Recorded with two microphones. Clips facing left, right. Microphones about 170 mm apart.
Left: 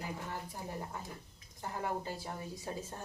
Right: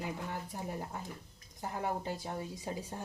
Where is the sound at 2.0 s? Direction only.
20° right (ahead or behind).